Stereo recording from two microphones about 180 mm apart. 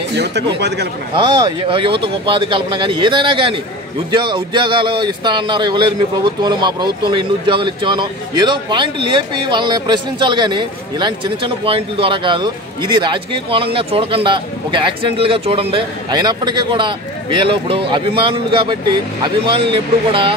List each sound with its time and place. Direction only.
0.1 s speech: 70° right (ahead or behind)
1.1 s speech: 25° right (ahead or behind)